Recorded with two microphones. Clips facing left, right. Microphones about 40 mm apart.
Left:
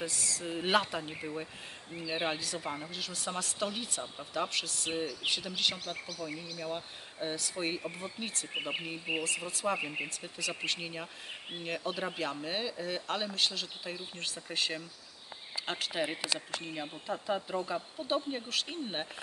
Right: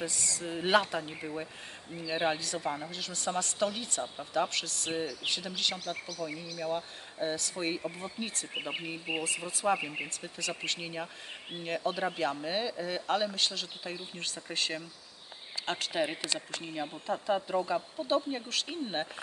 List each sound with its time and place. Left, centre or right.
0.0 s speech: centre